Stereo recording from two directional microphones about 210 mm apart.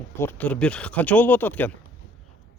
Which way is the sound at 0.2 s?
10° left (ahead or behind).